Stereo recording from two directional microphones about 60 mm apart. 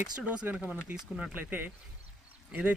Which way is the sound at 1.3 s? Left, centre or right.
Right.